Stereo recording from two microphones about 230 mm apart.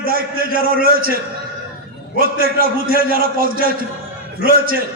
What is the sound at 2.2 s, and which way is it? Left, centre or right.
A man's voice, right.